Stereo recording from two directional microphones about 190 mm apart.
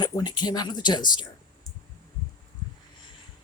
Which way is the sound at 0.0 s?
20° left (ahead or behind).